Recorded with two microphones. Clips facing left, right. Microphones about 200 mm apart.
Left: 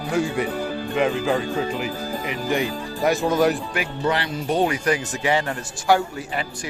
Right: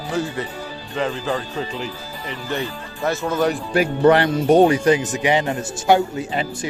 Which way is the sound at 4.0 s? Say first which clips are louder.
Right 10 dB; 55° right (ahead or behind).